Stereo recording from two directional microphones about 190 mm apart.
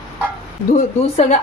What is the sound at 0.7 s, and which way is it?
Speech, 40° left (ahead or behind).